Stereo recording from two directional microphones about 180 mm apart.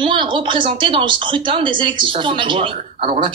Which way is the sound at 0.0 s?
25° right (ahead or behind).